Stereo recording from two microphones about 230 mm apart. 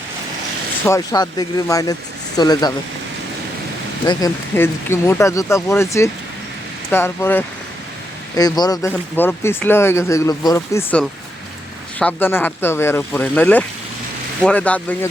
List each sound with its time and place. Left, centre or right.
0.9 s speech: centre
4.0 s speech: centre